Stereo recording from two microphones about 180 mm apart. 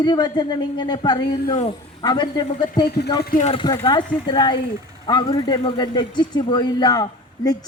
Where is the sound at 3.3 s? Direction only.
40° left (ahead or behind).